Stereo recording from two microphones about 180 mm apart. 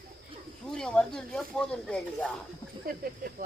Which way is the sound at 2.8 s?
55° right (ahead or behind).